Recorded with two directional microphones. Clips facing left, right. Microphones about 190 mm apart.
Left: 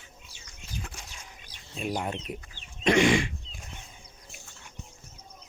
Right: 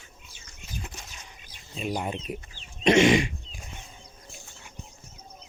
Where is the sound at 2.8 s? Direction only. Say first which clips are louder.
Right 3 dB; 20° right (ahead or behind).